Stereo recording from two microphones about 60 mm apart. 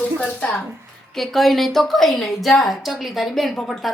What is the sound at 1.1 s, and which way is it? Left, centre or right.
A woman's voice, centre.